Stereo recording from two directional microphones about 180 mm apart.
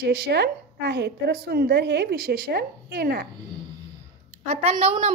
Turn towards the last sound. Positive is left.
turn(degrees=-35)  # may be behind; listen again after turning